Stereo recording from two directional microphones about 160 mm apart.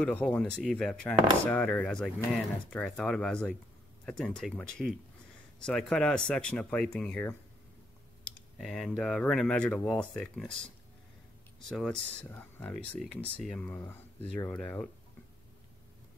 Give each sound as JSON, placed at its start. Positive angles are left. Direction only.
{"t": 0.0, "sound": "speech", "side_deg": 10}
{"t": 11.7, "sound": "speech", "side_deg": 5}